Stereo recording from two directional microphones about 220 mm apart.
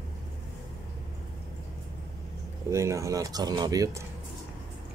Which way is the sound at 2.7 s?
15° right (ahead or behind).